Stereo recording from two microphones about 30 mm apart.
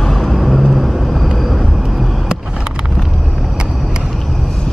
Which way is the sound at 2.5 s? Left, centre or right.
Right.